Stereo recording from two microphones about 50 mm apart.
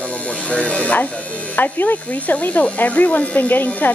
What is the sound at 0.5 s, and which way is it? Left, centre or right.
Speech, left.